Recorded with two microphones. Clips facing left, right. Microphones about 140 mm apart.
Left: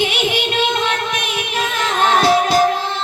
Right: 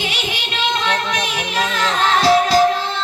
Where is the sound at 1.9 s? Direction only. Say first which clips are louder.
Left 1 dB; 50° left (ahead or behind).